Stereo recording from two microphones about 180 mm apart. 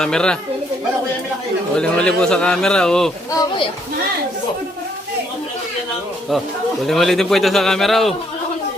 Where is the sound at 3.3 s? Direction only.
25° left (ahead or behind).